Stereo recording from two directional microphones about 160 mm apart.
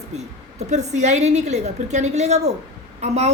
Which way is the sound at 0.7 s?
45° right (ahead or behind).